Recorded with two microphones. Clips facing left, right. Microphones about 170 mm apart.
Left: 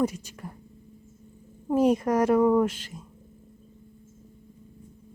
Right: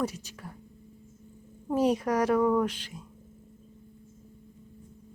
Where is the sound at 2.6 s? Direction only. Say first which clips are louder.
Left 3 dB; 45° left (ahead or behind).